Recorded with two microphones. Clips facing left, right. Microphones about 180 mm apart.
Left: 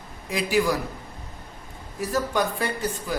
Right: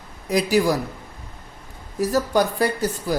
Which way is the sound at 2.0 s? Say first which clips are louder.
Right 5 dB; 40° right (ahead or behind).